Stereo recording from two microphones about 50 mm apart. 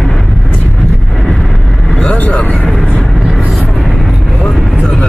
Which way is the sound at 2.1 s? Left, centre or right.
Left.